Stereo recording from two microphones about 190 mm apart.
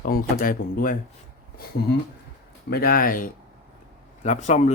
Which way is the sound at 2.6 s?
55° left (ahead or behind).